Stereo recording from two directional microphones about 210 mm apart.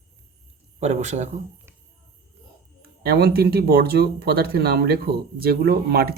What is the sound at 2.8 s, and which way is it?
Speech, 50° right (ahead or behind).